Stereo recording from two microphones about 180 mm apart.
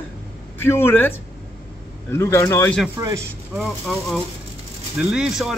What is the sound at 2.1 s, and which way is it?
Speech, 15° left (ahead or behind).